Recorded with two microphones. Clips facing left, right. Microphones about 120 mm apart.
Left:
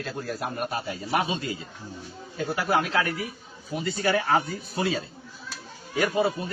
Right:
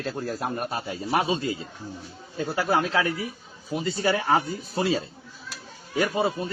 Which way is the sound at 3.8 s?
25° right (ahead or behind).